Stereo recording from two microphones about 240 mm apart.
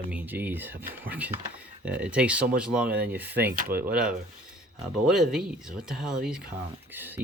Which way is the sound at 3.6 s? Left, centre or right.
Right.